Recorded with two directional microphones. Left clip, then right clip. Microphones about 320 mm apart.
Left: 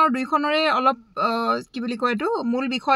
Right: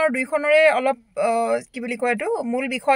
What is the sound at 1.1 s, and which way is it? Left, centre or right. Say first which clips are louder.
Speech: right 2 dB; centre.